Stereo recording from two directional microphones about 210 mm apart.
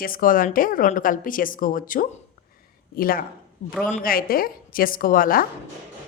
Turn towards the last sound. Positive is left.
turn(degrees=40)  # may be behind; listen again after turning